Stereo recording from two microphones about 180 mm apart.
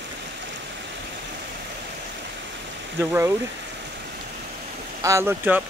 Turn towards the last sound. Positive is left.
turn(degrees=-10)  # may be behind; listen again after turning